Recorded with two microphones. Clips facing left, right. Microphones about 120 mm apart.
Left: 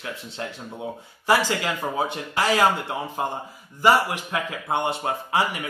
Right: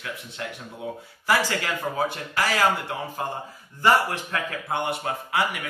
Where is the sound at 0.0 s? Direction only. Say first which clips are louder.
Left 2 dB; 30° left (ahead or behind).